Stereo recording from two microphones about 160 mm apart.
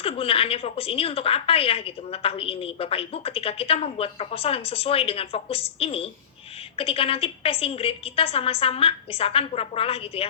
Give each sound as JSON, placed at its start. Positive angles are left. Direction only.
{"t": 0.0, "sound": "a woman's voice", "side_deg": 35}